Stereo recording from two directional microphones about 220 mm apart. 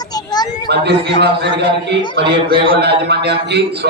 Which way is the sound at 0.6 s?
50° right (ahead or behind).